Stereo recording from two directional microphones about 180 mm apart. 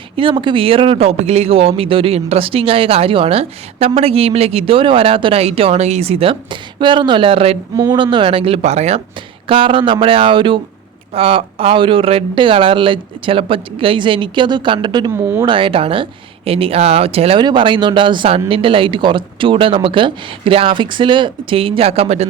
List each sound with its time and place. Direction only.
0.2 s speech: 30° right (ahead or behind)